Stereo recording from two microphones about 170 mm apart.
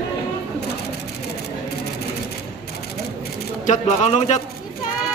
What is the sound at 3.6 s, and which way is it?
Speech, 45° left (ahead or behind).